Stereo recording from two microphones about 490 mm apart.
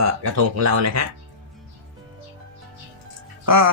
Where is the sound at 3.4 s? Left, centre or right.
Right.